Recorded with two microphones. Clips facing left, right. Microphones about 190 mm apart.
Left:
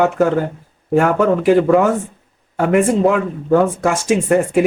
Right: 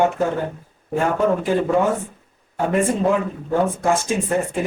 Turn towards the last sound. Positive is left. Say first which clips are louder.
# left 7 dB
turn(degrees=75)  # may be behind; listen again after turning